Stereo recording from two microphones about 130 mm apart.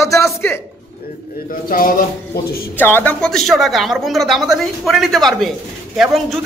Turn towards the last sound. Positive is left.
turn(degrees=0)  # may be behind; listen again after turning